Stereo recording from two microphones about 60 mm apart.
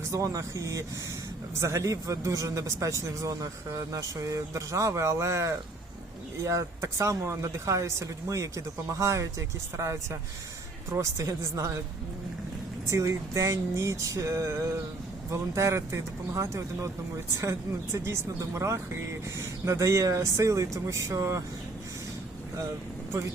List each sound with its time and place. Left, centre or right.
0.1 s a man's voice: right
12.9 s a man's voice: right